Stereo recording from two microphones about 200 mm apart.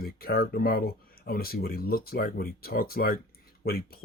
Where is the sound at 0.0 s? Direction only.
50° left (ahead or behind).